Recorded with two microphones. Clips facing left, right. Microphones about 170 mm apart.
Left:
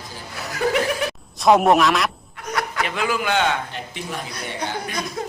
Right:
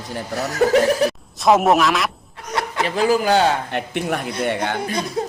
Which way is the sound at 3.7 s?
65° right (ahead or behind).